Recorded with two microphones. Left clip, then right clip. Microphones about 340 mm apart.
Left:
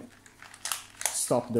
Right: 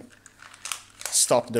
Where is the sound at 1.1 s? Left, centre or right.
Right.